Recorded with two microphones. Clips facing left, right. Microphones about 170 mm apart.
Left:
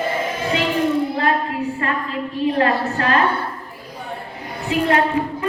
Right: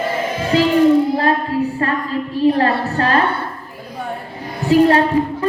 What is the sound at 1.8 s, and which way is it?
A woman's voice, 35° right (ahead or behind).